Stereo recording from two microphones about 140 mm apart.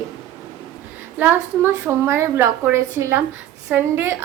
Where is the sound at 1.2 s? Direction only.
10° right (ahead or behind).